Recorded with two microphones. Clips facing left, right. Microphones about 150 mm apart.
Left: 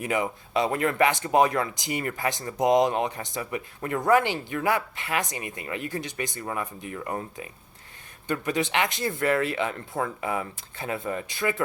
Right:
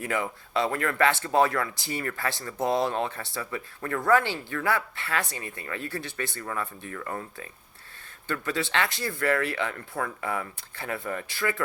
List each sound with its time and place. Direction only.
0.0 s speech: 20° left (ahead or behind)